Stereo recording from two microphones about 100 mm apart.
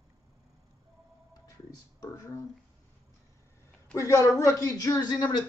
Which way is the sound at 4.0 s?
30° left (ahead or behind).